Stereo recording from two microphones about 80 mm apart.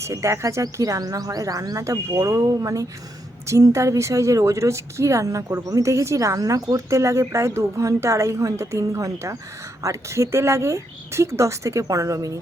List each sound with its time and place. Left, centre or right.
0.0 s speech: right